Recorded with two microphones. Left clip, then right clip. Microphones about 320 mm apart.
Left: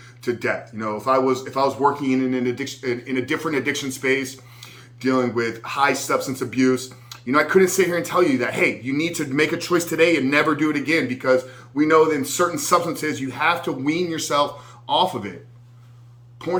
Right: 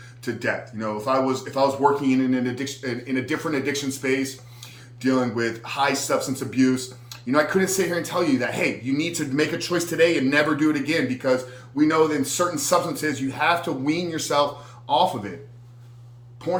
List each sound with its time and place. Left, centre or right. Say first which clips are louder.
0.3 s a man's voice: left 3 dB; centre